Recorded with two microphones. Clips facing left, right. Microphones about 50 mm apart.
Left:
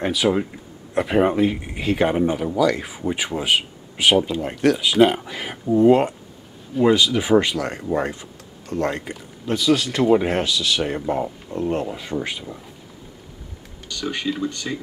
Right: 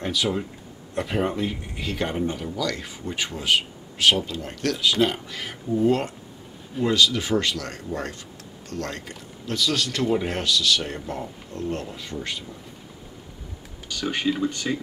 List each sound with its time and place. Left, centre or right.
0.0 s speech: centre
1.1 s speech: left
13.8 s speech: centre